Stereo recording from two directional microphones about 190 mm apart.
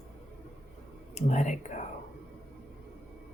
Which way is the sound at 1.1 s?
40° left (ahead or behind).